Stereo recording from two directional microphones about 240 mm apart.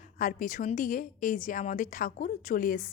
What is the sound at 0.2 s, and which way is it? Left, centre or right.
Speech, left.